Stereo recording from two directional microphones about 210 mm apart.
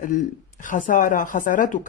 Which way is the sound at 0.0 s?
40° left (ahead or behind).